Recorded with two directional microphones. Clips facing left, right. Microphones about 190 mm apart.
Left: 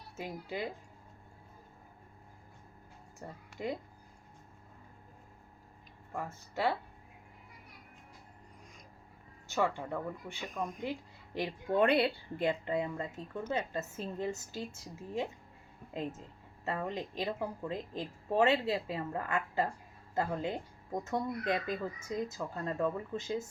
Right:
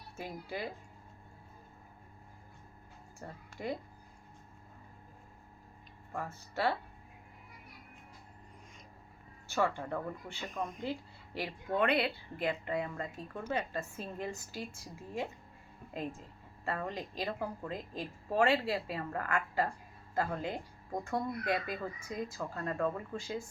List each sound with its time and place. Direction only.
0.2 s speech: 20° left (ahead or behind)
3.2 s speech: 20° left (ahead or behind)
6.5 s speech: 15° left (ahead or behind)
9.5 s speech: 15° left (ahead or behind)
10.4 s speech: centre (ahead or behind)
11.3 s speech: 25° left (ahead or behind)